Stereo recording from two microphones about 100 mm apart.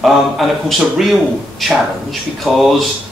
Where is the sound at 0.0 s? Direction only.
Centre (ahead or behind).